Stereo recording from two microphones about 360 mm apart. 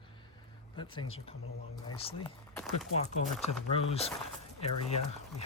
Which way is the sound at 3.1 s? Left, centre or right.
Centre.